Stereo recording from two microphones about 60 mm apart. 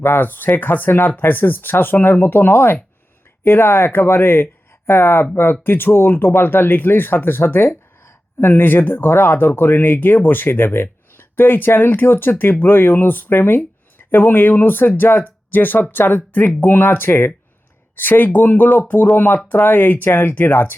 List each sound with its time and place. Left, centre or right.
0.0 s speech: left